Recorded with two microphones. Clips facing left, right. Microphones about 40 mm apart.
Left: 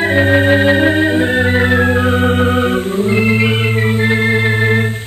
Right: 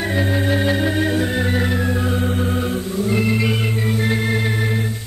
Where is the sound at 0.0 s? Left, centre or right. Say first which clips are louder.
Left 9 dB; left.